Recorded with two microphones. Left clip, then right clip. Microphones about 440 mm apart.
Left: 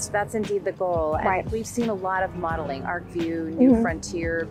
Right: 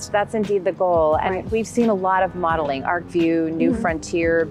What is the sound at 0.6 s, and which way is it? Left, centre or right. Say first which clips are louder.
A woman's voice: right 9 dB; right.